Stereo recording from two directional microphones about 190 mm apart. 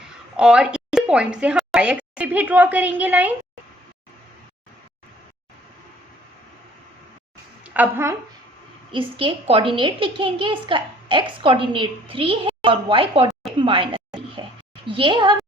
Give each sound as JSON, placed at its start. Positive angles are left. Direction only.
{"t": 0.3, "sound": "a woman's voice", "side_deg": -5}
{"t": 7.6, "sound": "a woman's voice", "side_deg": -10}
{"t": 8.9, "sound": "a child's voice", "side_deg": -25}